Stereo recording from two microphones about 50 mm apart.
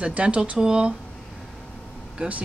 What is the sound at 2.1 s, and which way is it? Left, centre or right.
Speech, right.